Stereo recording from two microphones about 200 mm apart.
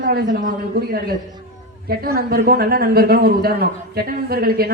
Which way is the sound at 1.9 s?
50° right (ahead or behind).